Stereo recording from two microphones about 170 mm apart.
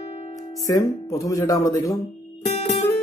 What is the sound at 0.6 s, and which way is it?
Speech, 20° left (ahead or behind).